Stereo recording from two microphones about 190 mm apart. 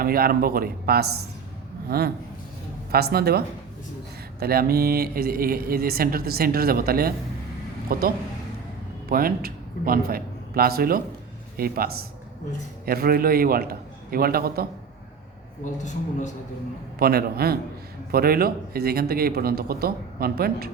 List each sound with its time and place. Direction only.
0.0 s a man's voice: 50° right (ahead or behind)
15.6 s speech: 40° left (ahead or behind)
17.0 s a man's voice: 55° right (ahead or behind)